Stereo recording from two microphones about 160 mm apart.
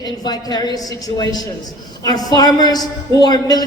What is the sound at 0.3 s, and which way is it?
A woman's voice, 25° left (ahead or behind).